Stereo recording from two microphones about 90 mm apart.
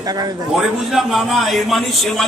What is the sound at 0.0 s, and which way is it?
Speech, 45° right (ahead or behind).